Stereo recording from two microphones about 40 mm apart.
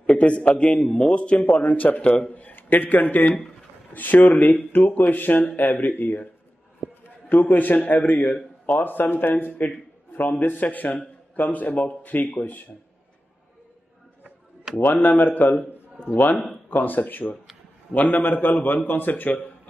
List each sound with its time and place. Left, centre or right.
0.0 s a man's voice: left
0.9 s a man's voice: left
7.2 s a man's voice: left
11.7 s speech: left
12.1 s a man's voice: left
14.8 s a man's voice: left